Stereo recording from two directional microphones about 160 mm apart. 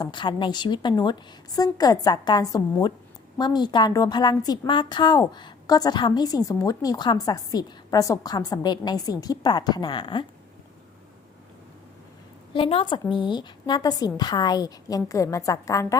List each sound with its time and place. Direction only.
0.0 s a woman's voice: 30° left (ahead or behind)
12.5 s a woman's voice: 35° left (ahead or behind)